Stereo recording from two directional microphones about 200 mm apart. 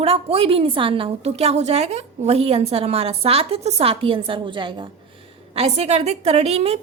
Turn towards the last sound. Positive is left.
turn(degrees=-30)  # may be behind; listen again after turning